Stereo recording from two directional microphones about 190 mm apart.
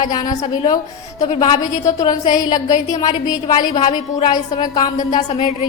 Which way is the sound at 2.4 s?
20° left (ahead or behind).